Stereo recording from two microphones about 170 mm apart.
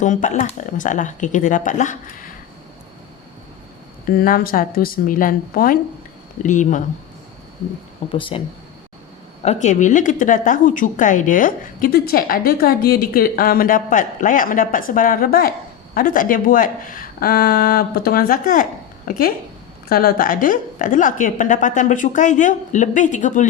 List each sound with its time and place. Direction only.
0.0 s a woman's voice: 45° left (ahead or behind)
4.0 s speech: 60° left (ahead or behind)
6.4 s a woman's voice: 45° left (ahead or behind)
8.1 s speech: 30° left (ahead or behind)
9.4 s a woman's voice: 40° left (ahead or behind)